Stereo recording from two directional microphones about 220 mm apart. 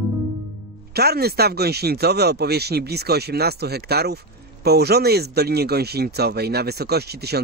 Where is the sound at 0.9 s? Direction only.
45° right (ahead or behind).